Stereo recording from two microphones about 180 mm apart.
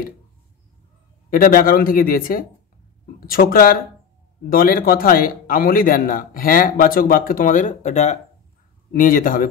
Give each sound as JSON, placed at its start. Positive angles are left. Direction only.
{"t": 1.3, "sound": "speech", "side_deg": 50}